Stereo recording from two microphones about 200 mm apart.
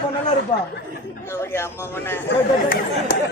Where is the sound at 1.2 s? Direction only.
15° left (ahead or behind).